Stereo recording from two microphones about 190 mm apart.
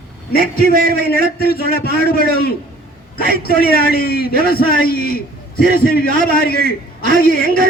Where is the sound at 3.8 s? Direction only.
55° left (ahead or behind).